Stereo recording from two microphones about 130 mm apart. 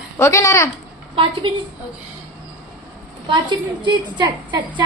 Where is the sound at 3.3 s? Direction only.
35° right (ahead or behind).